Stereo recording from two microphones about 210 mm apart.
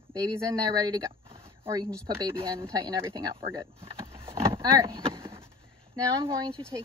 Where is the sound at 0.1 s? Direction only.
20° right (ahead or behind).